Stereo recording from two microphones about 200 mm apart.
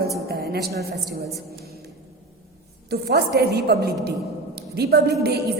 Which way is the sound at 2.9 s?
55° right (ahead or behind).